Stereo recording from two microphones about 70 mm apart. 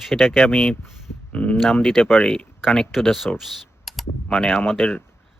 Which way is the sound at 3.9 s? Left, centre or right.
Centre.